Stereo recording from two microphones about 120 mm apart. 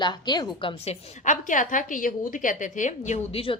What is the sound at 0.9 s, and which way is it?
A woman's voice, 90° left.